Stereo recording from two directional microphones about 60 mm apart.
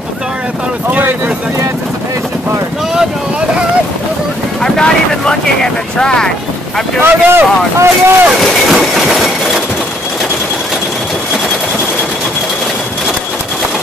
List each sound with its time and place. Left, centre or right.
0.8 s speech: right
4.6 s speech: centre
7.0 s speech: right
8.6 s train: centre